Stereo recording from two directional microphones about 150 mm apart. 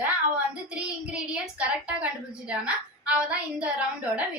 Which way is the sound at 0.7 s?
5° right (ahead or behind).